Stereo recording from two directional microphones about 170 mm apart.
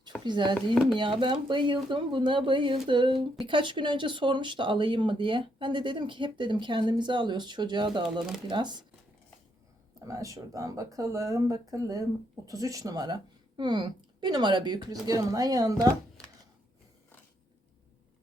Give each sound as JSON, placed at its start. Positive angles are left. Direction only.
{"t": 0.3, "sound": "speech", "side_deg": -25}
{"t": 10.1, "sound": "speech", "side_deg": -20}